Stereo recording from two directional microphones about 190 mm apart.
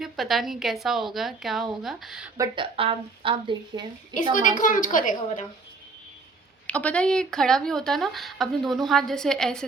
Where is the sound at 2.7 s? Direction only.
30° right (ahead or behind).